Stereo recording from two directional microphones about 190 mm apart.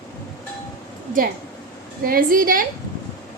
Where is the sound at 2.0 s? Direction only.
50° right (ahead or behind).